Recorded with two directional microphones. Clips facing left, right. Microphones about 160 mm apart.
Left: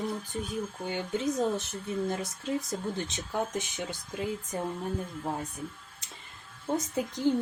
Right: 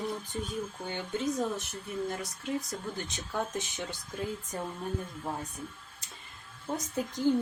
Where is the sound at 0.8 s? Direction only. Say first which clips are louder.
Left 3 dB; 15° left (ahead or behind).